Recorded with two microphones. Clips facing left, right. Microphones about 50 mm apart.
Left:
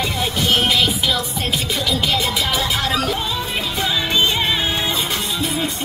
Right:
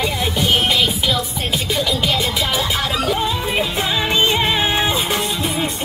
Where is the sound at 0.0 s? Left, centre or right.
Centre.